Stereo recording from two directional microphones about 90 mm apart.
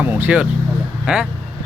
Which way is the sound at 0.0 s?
20° right (ahead or behind).